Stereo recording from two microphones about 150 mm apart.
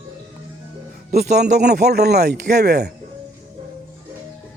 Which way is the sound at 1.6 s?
90° right.